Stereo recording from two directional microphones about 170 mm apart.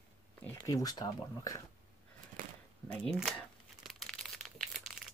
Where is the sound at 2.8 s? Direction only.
10° left (ahead or behind).